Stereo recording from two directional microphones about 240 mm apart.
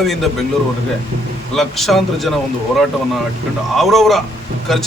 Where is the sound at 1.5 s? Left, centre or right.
Centre.